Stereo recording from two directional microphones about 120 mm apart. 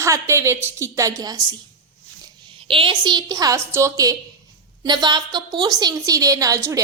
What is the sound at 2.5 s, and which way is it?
A woman's voice, 45° right (ahead or behind).